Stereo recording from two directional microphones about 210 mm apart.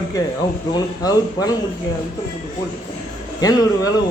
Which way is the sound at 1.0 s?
20° left (ahead or behind).